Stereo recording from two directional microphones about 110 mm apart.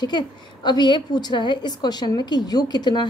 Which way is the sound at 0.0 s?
40° left (ahead or behind).